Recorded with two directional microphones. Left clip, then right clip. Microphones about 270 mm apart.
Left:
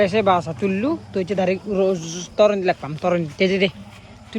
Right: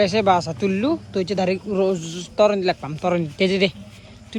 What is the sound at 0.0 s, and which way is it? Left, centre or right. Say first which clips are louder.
Speech: even; centre.